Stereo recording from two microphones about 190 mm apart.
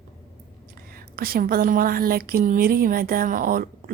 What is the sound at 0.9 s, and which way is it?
A woman's voice, 50° right (ahead or behind).